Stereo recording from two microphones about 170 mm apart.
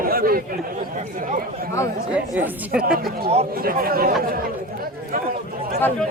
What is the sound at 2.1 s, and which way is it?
Speech, 10° right (ahead or behind).